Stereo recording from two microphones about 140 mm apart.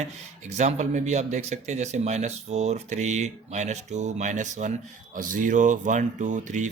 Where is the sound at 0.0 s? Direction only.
55° right (ahead or behind).